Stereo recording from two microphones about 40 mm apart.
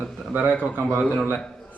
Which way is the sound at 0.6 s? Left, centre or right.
Right.